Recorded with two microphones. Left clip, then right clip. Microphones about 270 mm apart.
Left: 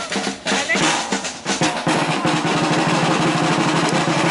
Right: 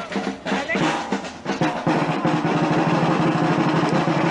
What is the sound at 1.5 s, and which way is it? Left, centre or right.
Drum, centre.